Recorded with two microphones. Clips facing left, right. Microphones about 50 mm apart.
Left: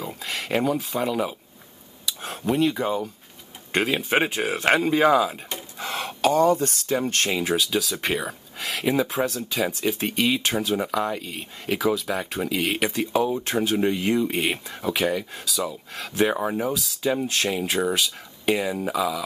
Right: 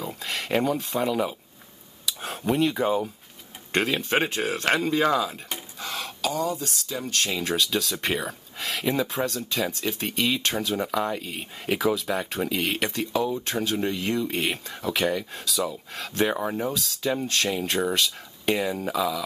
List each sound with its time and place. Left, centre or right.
0.0 s speech: centre
5.8 s a sound: left
7.0 s speech: left
7.4 s speech: centre
13.0 s speech: centre